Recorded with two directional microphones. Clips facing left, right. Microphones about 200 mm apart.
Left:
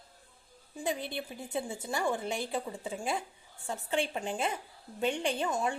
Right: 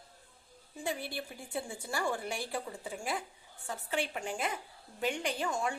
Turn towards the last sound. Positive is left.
turn(degrees=20)  # may be behind; listen again after turning